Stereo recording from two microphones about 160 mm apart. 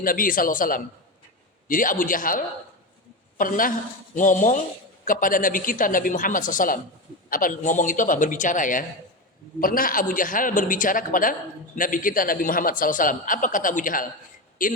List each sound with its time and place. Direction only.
0.0 s speech: 60° left (ahead or behind)